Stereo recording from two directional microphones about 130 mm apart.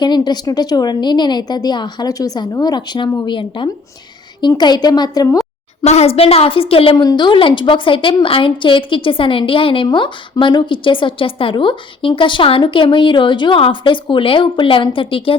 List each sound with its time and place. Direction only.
0.0 s a woman's voice: 35° left (ahead or behind)
5.8 s a woman's voice: 55° left (ahead or behind)
6.9 s a woman's voice: 30° left (ahead or behind)